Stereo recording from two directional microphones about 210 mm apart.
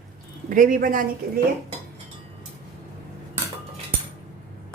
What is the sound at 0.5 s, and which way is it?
Speech, 40° right (ahead or behind).